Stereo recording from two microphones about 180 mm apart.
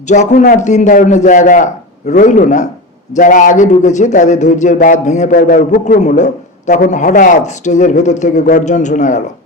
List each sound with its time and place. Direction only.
0.1 s a man's voice: 40° left (ahead or behind)